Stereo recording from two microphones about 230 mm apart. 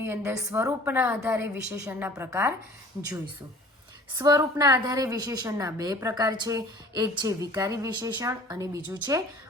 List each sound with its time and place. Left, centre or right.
0.0 s a woman's voice: centre
4.2 s a woman's voice: centre